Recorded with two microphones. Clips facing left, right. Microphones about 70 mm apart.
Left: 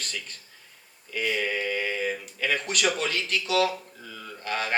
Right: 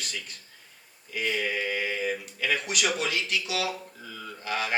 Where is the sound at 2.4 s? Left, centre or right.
Left.